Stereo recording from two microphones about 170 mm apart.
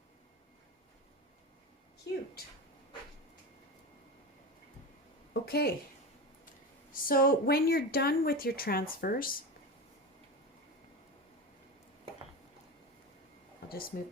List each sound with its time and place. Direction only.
2.1 s speech: 80° left
5.3 s a woman's voice: 65° left (ahead or behind)
6.9 s speech: 60° left (ahead or behind)
13.9 s speech: 60° left (ahead or behind)